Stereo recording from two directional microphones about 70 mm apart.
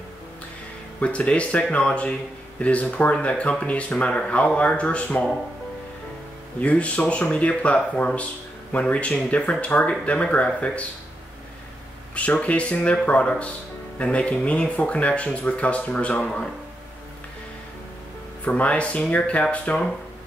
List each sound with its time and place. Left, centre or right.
1.0 s speech: centre
6.6 s speech: centre
12.2 s speech: centre
18.4 s speech: centre